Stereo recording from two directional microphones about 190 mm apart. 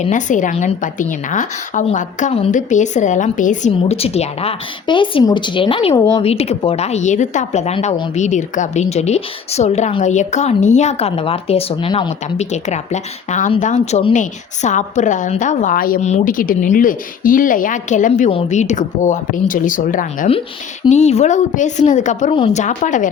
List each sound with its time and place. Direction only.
0.0 s a woman's voice: 40° left (ahead or behind); by 6.2 s 20° left (ahead or behind)
6.2 s a woman's voice: 35° left (ahead or behind)